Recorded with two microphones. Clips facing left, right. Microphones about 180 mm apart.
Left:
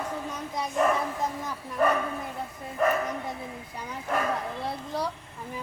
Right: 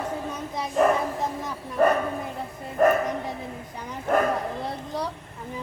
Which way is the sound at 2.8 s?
50° right (ahead or behind).